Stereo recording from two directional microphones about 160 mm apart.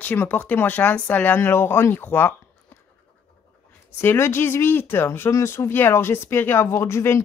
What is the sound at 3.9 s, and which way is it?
Speech, 15° left (ahead or behind).